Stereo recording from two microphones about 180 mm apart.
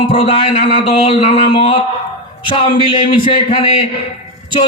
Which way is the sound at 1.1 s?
30° left (ahead or behind).